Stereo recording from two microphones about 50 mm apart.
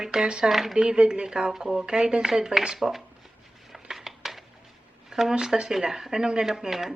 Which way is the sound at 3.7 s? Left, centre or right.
Centre.